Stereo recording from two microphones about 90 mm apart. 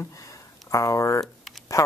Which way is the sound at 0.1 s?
35° left (ahead or behind).